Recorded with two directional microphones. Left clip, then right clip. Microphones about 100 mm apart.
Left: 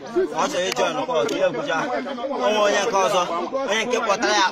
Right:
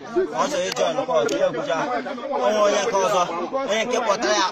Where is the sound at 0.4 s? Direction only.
25° left (ahead or behind).